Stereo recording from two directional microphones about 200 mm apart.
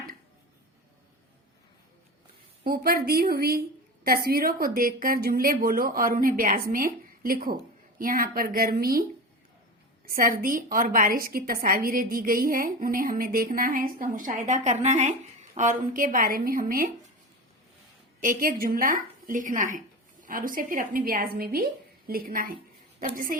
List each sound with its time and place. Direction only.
2.6 s a woman's voice: 45° right (ahead or behind)
10.1 s a woman's voice: 45° right (ahead or behind)
18.2 s a woman's voice: 45° right (ahead or behind)